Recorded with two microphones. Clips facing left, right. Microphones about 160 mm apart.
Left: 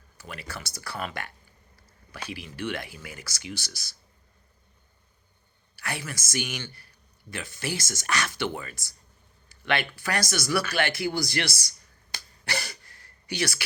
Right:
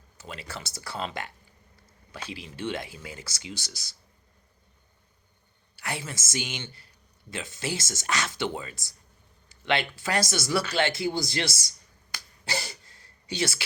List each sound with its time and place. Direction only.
0.2 s speech: 25° right (ahead or behind)
5.7 s speech: 20° right (ahead or behind)
12.5 s a sound: 25° right (ahead or behind)